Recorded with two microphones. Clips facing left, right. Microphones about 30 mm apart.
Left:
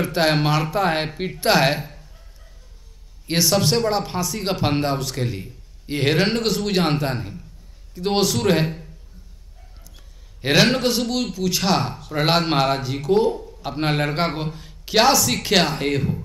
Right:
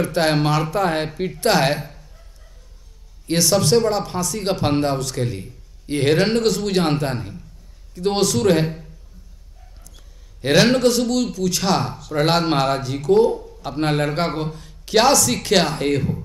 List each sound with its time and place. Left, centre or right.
0.0 s speech: centre
0.9 s speech: left
3.3 s speech: centre
9.9 s a man's voice: centre